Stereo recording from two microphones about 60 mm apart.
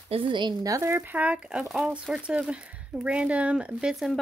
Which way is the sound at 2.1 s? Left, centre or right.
Centre.